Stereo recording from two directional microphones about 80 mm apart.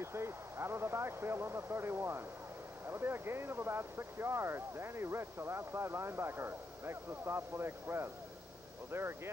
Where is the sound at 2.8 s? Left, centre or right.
Right.